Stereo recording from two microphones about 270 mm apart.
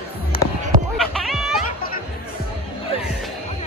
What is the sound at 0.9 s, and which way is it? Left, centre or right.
Cat, centre.